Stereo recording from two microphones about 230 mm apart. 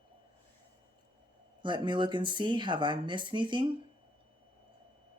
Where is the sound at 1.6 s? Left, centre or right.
Right.